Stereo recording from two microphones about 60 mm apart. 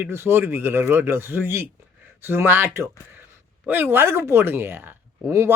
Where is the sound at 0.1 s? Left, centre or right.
Right.